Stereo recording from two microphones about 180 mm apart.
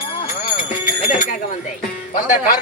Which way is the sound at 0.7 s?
45° left (ahead or behind).